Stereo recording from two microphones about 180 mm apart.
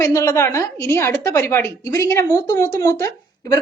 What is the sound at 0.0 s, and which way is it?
A woman's voice, 15° left (ahead or behind).